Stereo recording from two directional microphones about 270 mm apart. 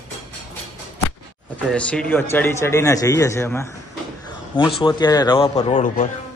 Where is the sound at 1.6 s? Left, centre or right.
Centre; by 6.1 s left.